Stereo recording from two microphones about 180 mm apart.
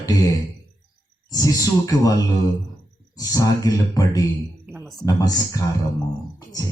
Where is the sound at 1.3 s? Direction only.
20° left (ahead or behind).